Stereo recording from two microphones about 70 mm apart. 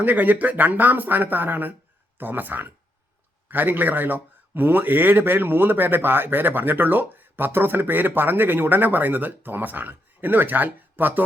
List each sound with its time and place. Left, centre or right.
0.0 s speech: right